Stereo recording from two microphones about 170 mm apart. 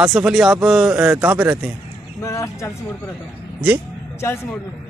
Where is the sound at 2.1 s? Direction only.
15° left (ahead or behind).